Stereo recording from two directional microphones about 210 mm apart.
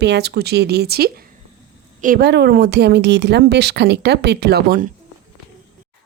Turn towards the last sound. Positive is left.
turn(degrees=-45)  # may be behind; listen again after turning